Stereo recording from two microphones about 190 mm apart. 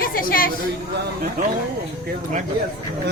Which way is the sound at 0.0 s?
50° left (ahead or behind).